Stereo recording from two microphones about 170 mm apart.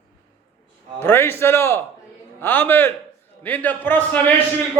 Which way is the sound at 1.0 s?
15° left (ahead or behind).